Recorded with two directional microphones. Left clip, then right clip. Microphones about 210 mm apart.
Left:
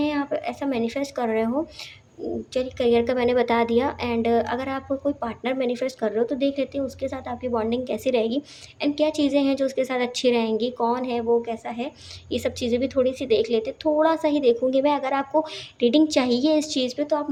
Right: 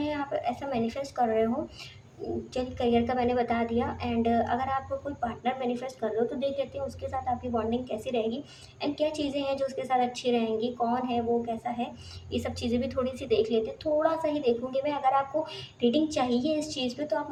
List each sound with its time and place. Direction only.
0.0 s a woman's voice: 40° left (ahead or behind)
2.5 s a woman's voice: 40° left (ahead or behind)